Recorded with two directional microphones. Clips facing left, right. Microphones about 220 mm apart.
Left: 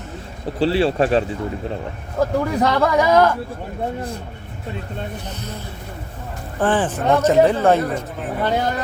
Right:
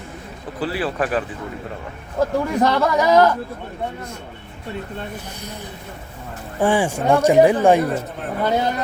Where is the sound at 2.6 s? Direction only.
Centre (ahead or behind).